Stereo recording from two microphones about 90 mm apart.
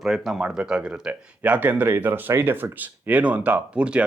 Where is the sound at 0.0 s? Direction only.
5° right (ahead or behind).